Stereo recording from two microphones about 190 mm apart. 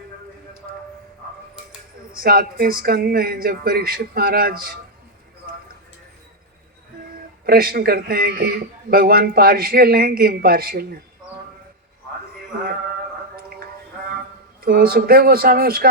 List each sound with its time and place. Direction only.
2.1 s a man's voice: 50° right (ahead or behind)
7.4 s a man's voice: 50° right (ahead or behind)
14.6 s a man's voice: 50° right (ahead or behind)